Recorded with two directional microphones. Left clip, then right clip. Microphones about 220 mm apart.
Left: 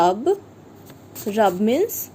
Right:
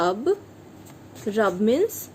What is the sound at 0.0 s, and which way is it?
A woman's voice, 10° left (ahead or behind).